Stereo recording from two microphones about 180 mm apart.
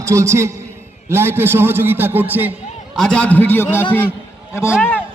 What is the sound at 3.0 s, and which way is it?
Speech, 5° left (ahead or behind).